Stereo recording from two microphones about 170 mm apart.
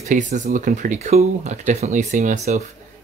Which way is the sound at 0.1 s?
50° right (ahead or behind).